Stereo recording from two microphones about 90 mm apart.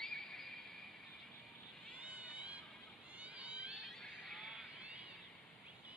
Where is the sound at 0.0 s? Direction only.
5° left (ahead or behind).